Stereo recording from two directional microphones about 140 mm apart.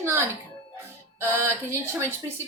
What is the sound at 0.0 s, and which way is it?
A woman's voice, 15° right (ahead or behind).